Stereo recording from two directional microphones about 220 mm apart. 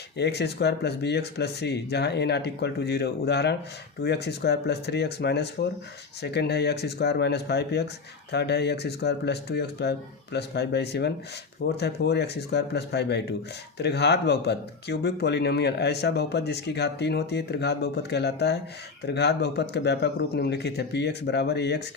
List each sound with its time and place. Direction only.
0.2 s speech: 50° left (ahead or behind)